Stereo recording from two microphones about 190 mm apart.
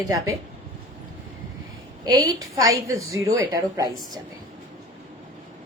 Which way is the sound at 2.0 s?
20° right (ahead or behind).